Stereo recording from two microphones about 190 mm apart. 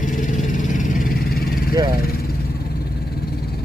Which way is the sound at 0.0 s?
40° left (ahead or behind).